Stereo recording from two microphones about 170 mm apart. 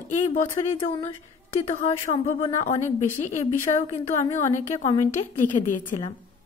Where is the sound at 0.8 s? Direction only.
35° left (ahead or behind); by 5.9 s 50° left (ahead or behind).